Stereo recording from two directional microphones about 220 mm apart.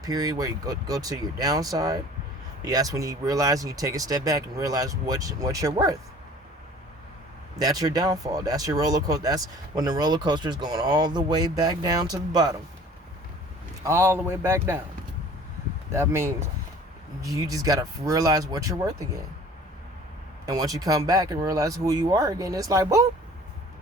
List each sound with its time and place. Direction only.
0.0 s speech: 15° right (ahead or behind)
7.6 s speech: 15° right (ahead or behind)
13.8 s speech: 10° right (ahead or behind)
15.9 s speech: 10° right (ahead or behind)
20.4 s speech: 15° right (ahead or behind)